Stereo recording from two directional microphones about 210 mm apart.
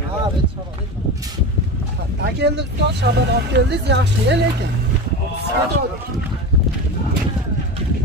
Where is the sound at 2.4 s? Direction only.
55° right (ahead or behind).